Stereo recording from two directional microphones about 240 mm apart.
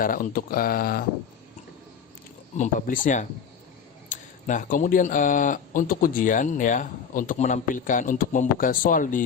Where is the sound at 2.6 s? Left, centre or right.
Left.